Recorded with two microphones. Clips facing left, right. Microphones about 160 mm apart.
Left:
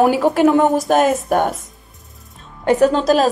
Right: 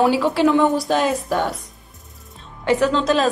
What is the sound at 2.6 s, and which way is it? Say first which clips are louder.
Speech: left 4 dB; 45° left (ahead or behind).